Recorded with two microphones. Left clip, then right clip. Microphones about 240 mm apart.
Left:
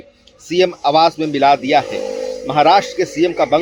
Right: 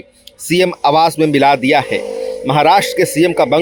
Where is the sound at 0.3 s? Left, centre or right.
Right.